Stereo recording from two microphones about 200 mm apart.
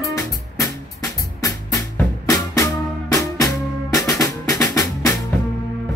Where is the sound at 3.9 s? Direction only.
15° left (ahead or behind).